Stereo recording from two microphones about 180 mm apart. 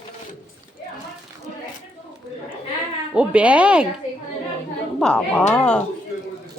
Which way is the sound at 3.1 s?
5° right (ahead or behind).